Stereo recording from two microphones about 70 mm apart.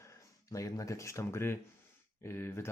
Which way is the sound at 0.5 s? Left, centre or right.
Left.